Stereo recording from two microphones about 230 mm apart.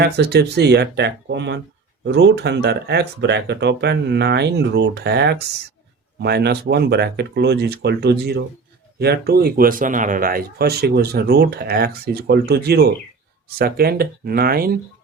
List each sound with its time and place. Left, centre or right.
0.0 s speech: right